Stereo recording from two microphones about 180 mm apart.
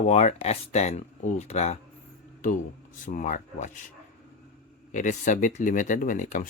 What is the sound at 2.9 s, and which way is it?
Speech, 45° left (ahead or behind).